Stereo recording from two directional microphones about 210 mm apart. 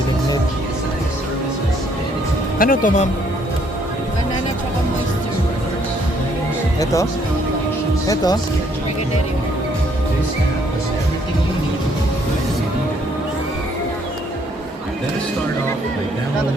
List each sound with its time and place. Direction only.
2.6 s speech: 40° left (ahead or behind)
6.7 s speech: 15° left (ahead or behind)